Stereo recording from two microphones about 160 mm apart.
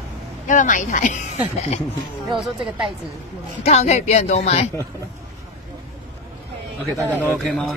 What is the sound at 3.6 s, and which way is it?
Speech, 40° left (ahead or behind).